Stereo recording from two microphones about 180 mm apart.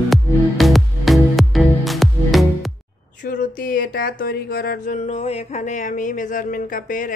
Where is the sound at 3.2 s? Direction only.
50° left (ahead or behind).